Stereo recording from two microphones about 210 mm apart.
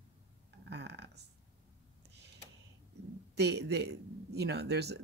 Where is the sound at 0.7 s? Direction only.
55° right (ahead or behind).